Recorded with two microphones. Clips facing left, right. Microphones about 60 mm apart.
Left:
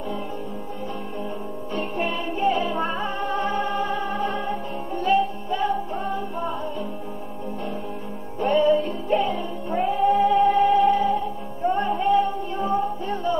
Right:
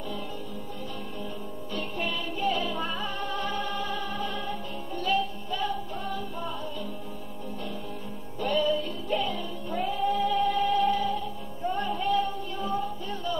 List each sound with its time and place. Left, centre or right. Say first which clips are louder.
1.7 s music: left 6 dB; left
8.4 s music: left 7 dB; left